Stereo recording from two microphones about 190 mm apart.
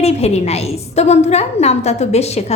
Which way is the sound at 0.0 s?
35° left (ahead or behind).